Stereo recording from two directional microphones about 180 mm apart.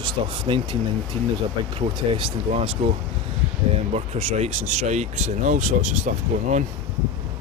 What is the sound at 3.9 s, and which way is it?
Speech, 35° right (ahead or behind).